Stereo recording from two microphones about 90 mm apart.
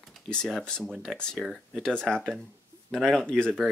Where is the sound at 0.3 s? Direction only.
5° left (ahead or behind).